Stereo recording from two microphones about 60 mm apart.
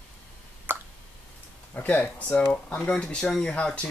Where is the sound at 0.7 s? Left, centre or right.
Right.